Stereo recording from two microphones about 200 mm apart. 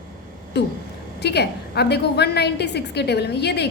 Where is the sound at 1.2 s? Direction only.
55° left (ahead or behind).